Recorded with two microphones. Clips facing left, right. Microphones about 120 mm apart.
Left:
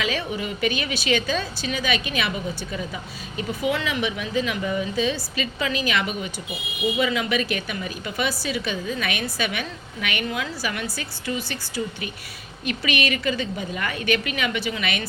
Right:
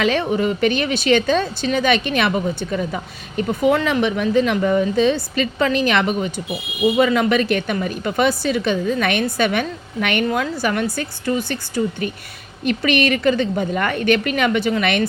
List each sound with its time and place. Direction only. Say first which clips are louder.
0.0 s a woman's voice: right 9 dB; 50° right (ahead or behind)